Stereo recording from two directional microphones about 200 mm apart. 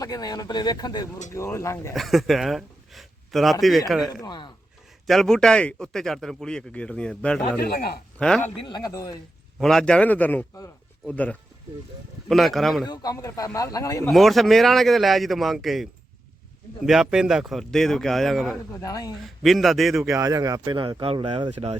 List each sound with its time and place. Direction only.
0.0 s a man's voice: 20° left (ahead or behind)
1.9 s a man's voice: centre (ahead or behind)
4.1 s speech: 20° left (ahead or behind)
5.0 s a man's voice: centre (ahead or behind)
7.6 s a man's voice: 50° left (ahead or behind)
8.2 s a man's voice: 5° left (ahead or behind)
8.6 s speech: 20° left (ahead or behind)
9.6 s a man's voice: centre (ahead or behind)
12.9 s a man's voice: 20° left (ahead or behind)
14.1 s a man's voice: centre (ahead or behind)
18.7 s a man's voice: 15° left (ahead or behind)
19.4 s a man's voice: centre (ahead or behind)
20.1 s speech: 15° right (ahead or behind)